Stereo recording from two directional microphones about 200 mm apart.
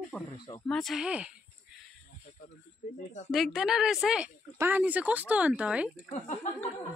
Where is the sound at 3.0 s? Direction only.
35° left (ahead or behind).